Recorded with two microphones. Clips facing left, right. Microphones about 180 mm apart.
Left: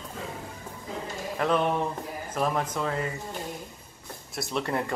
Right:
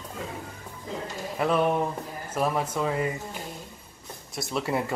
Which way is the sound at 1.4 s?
5° right (ahead or behind).